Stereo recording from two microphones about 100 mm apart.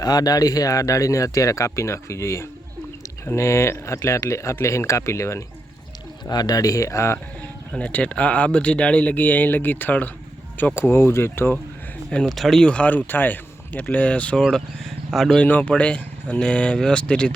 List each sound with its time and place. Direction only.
0.0 s speech: 40° left (ahead or behind)
6.2 s speech: 40° left (ahead or behind)
7.7 s a man's voice: 10° left (ahead or behind)
12.1 s a man's voice: 5° left (ahead or behind)
15.4 s a man's voice: 15° left (ahead or behind)